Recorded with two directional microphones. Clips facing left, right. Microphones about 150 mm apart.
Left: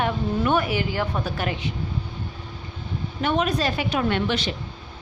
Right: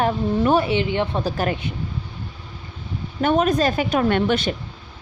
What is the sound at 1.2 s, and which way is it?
Speech, 45° right (ahead or behind).